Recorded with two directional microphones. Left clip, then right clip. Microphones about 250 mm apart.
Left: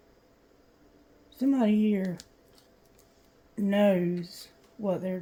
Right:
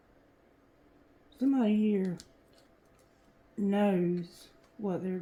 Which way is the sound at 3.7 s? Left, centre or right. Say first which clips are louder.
Left 5 dB; left.